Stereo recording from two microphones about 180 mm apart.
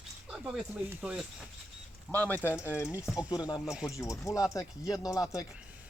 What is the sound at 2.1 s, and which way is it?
Speech, 10° left (ahead or behind).